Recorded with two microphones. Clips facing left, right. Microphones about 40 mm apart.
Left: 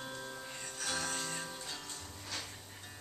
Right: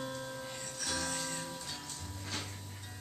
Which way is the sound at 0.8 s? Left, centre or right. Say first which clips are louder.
Even; centre.